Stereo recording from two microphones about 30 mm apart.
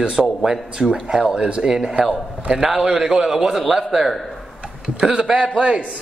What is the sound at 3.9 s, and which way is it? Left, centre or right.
Speech, centre.